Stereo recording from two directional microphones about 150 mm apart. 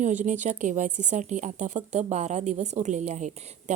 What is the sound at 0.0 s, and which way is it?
A woman's voice, 55° right (ahead or behind).